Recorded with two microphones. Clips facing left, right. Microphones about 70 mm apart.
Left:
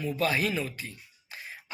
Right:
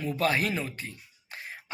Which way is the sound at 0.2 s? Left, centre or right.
Right.